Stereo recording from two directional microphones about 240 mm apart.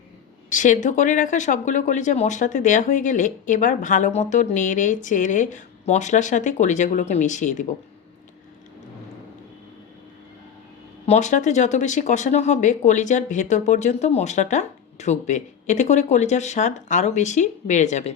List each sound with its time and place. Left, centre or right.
0.5 s speech: left
11.0 s speech: left